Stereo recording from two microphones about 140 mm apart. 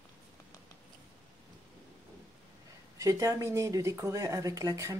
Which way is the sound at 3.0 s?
25° right (ahead or behind).